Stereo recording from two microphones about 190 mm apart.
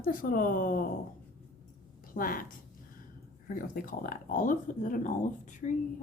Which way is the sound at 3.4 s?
45° left (ahead or behind).